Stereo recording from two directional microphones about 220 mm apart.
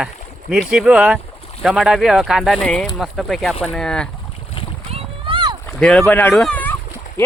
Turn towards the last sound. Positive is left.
turn(degrees=10)  # may be behind; listen again after turning